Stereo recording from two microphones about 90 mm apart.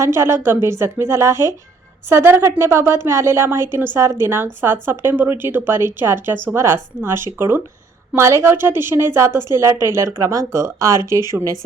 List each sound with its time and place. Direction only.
0.0 s a woman's voice: 30° right (ahead or behind)